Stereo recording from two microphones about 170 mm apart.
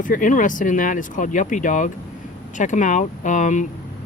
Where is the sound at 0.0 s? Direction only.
50° left (ahead or behind).